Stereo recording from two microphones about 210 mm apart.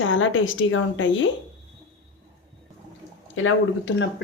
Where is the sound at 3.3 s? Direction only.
65° left (ahead or behind).